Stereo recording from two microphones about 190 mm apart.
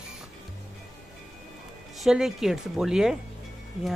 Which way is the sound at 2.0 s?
Centre (ahead or behind).